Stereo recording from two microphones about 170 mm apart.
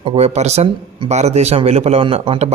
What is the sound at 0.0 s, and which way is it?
Speech, 35° right (ahead or behind).